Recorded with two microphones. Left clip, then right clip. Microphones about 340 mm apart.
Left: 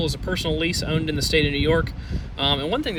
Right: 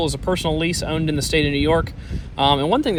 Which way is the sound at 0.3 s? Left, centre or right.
Centre.